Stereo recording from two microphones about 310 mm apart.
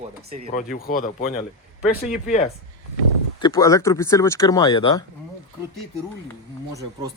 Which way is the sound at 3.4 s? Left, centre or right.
Centre.